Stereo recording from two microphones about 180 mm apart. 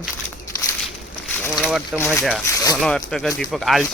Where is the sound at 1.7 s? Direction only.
Centre (ahead or behind).